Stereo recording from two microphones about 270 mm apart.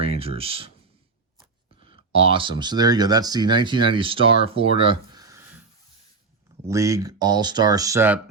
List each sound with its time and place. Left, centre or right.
0.0 s speech: right
2.1 s speech: centre
6.7 s speech: centre